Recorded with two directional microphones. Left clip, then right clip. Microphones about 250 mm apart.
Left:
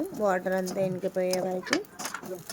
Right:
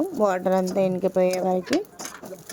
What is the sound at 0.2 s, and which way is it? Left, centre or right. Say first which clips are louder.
Speech: right 5 dB; centre.